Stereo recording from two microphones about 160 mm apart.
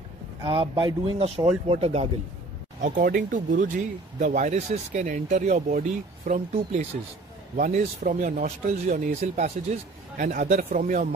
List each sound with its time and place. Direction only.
0.5 s speech: 30° right (ahead or behind)
2.8 s speech: 55° right (ahead or behind)
6.5 s a man's voice: 45° right (ahead or behind)